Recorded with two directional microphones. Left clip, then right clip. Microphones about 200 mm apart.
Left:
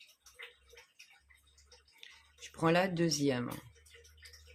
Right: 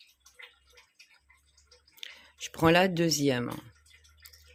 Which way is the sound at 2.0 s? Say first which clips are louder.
Right 11 dB; 50° right (ahead or behind).